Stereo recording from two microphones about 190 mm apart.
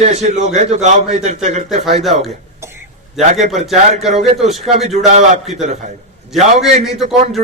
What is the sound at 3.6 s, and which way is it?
Speech, centre (ahead or behind).